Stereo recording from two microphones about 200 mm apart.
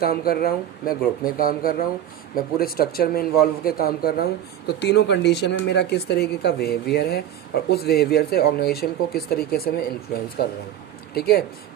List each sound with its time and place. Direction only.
0.0 s a man's voice: 50° left (ahead or behind)